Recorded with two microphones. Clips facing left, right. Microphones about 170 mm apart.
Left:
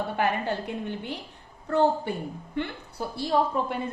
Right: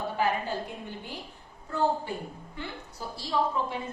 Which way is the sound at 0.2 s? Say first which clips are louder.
Left 1 dB; 65° left (ahead or behind).